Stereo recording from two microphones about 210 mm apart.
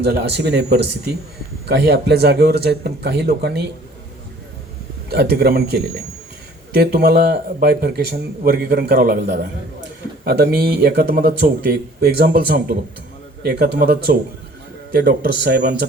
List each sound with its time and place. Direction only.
0.0 s speech: 50° right (ahead or behind)
5.0 s speech: 50° right (ahead or behind)